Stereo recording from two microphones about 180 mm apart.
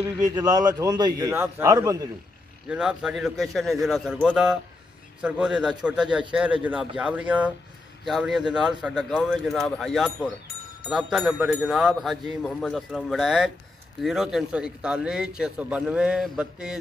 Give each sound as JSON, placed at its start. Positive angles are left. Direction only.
{"t": 0.4, "sound": "a man's voice", "side_deg": -20}
{"t": 2.7, "sound": "a man's voice", "side_deg": -5}